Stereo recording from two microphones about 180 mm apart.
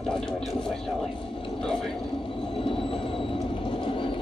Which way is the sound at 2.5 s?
30° left (ahead or behind).